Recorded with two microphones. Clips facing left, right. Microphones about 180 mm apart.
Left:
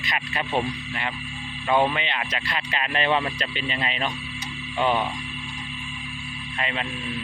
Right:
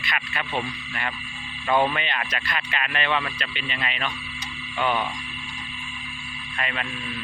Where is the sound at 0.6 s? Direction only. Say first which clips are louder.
Left 4 dB; 20° left (ahead or behind).